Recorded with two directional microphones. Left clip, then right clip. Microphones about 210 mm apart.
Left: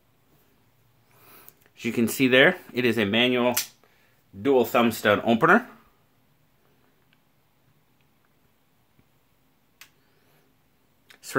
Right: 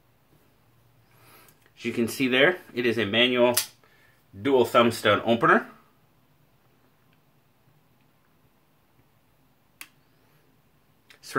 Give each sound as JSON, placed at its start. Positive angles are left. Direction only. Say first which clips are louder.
{"t": 1.3, "sound": "speech", "louder": "left 1 dB", "side_deg": 50}